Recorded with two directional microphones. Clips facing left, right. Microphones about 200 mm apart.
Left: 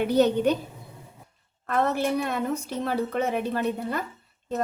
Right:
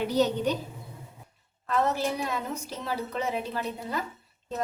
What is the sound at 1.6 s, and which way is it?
A woman's voice, 55° left (ahead or behind).